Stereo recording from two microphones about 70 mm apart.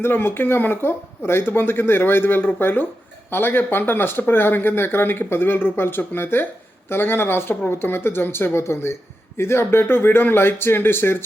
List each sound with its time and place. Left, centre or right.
0.0 s speech: left